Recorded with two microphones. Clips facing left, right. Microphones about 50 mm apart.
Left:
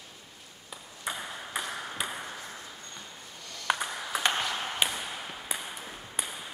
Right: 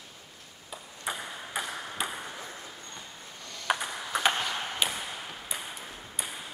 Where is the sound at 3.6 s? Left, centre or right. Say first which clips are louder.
Even; centre.